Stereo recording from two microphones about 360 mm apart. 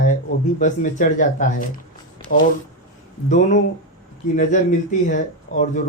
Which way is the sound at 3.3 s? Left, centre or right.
Left.